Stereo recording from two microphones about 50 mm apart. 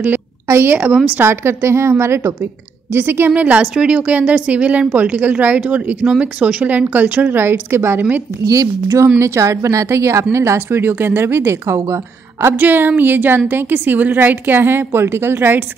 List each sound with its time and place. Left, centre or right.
0.7 s a woman's voice: right
1.2 s a woman's voice: right
2.9 s a woman's voice: right
3.3 s a woman's voice: right
7.3 s a woman's voice: right
8.8 s a woman's voice: right
10.8 s a woman's voice: right
12.5 s a woman's voice: right